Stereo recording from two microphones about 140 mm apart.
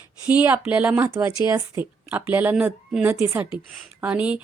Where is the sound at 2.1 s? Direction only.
10° right (ahead or behind).